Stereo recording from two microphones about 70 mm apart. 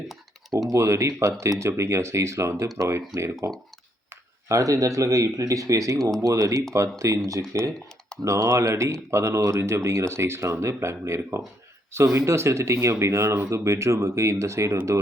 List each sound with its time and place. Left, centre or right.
0.7 s speech: right
13.5 s speech: right